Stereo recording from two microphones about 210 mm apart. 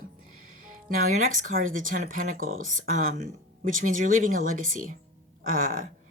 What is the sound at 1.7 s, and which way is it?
Speech, 40° right (ahead or behind).